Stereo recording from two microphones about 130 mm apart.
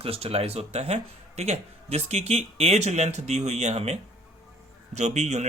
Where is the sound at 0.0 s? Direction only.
50° right (ahead or behind).